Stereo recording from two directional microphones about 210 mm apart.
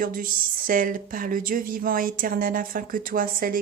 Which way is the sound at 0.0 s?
40° right (ahead or behind).